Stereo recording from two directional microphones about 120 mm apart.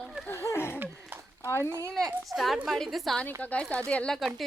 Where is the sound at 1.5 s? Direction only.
20° left (ahead or behind).